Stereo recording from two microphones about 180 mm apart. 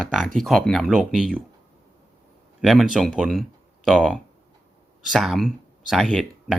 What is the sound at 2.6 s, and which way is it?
Speech, centre (ahead or behind).